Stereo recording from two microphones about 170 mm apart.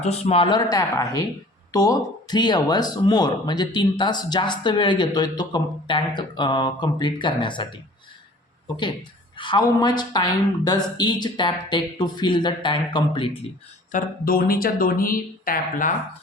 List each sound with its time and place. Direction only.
0.0 s speech: 40° left (ahead or behind)
9.4 s speech: 25° left (ahead or behind)
13.9 s speech: 60° left (ahead or behind)